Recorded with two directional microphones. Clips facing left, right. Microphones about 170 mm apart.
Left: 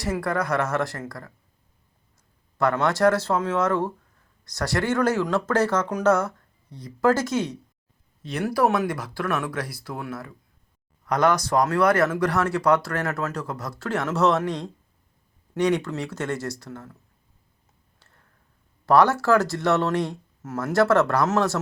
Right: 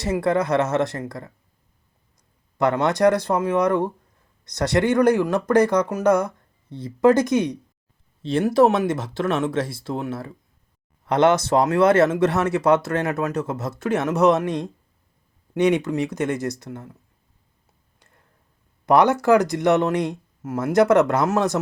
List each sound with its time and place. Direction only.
0.0 s speech: 20° right (ahead or behind)
2.6 s speech: 20° right (ahead or behind)
6.7 s speech: 25° right (ahead or behind)
18.9 s speech: 20° right (ahead or behind)